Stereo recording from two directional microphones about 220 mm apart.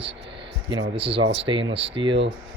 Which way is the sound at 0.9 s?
25° right (ahead or behind).